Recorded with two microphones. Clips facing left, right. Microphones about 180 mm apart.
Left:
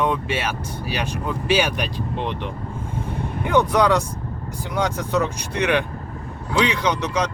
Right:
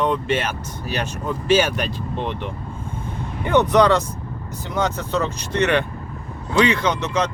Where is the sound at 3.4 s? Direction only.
10° left (ahead or behind).